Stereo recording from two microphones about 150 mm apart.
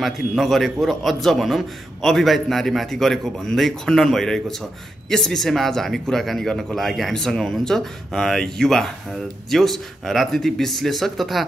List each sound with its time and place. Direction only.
0.0 s a man's voice: centre (ahead or behind)